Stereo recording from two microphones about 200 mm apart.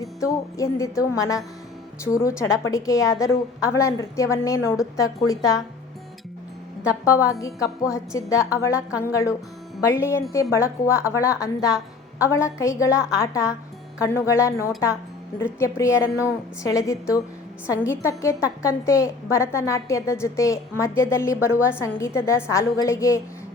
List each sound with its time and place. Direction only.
0.0 s a woman's voice: 15° left (ahead or behind)
6.8 s a woman's voice: 15° left (ahead or behind)